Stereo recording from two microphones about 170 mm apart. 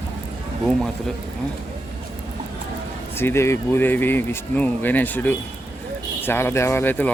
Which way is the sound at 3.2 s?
15° left (ahead or behind).